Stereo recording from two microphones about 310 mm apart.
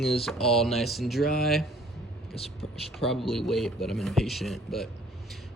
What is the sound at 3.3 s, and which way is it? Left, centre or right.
Speech, centre.